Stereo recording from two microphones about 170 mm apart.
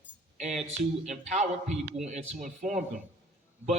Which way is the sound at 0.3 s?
45° right (ahead or behind).